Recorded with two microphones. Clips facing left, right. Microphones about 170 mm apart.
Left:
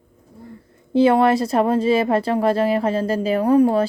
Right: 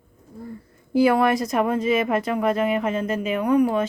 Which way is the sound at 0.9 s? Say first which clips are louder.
Left 3 dB; 25° left (ahead or behind).